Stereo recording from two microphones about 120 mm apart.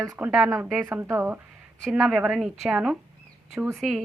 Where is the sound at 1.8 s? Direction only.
Centre (ahead or behind).